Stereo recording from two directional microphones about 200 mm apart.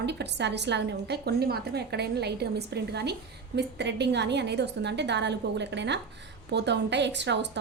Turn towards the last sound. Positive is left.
turn(degrees=-60)  # may be behind; listen again after turning